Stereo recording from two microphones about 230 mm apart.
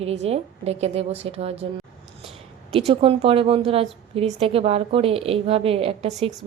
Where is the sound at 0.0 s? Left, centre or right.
Right.